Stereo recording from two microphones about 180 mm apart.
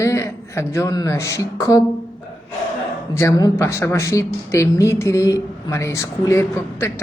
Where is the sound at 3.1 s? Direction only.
15° left (ahead or behind).